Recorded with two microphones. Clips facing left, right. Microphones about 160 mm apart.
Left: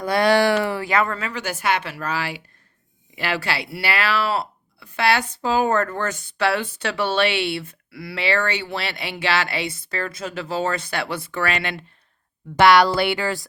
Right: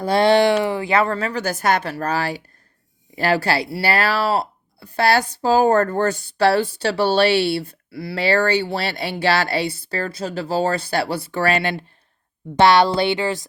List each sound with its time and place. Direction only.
0.0 s speech: 30° right (ahead or behind)